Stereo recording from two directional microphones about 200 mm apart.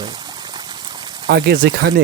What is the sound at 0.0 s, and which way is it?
Pour, 20° right (ahead or behind).